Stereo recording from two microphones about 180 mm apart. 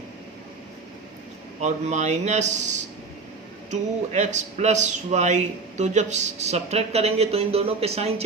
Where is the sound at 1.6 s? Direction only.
40° right (ahead or behind).